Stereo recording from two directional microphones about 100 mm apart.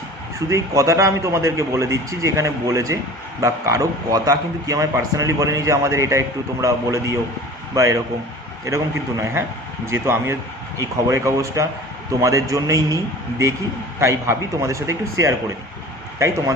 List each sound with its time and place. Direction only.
0.3 s a man's voice: 30° right (ahead or behind)
14.0 s a man's voice: 30° right (ahead or behind)